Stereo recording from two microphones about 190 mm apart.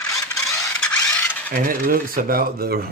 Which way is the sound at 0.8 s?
5° left (ahead or behind).